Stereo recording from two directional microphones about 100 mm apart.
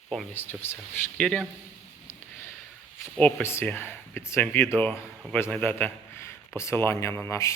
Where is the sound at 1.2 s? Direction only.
10° left (ahead or behind).